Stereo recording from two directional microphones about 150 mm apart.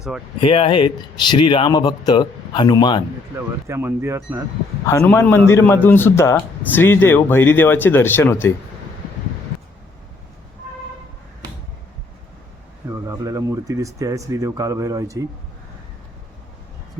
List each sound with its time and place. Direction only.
0.4 s speech: 35° left (ahead or behind)
3.3 s speech: 15° right (ahead or behind)
5.0 s a man's voice: 10° left (ahead or behind)
12.9 s speech: 20° right (ahead or behind)